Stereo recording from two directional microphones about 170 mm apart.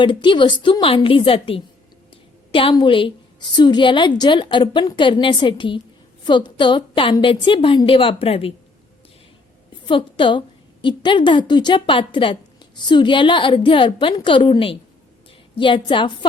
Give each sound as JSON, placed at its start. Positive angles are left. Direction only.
{"t": 0.0, "sound": "a woman's voice", "side_deg": 30}
{"t": 9.8, "sound": "a woman's voice", "side_deg": 30}